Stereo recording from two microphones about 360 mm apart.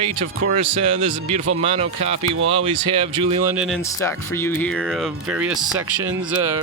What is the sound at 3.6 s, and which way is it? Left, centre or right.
Speech, centre.